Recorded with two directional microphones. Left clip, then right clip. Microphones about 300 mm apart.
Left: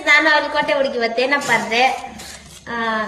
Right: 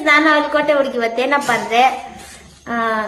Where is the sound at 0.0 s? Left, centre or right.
Centre.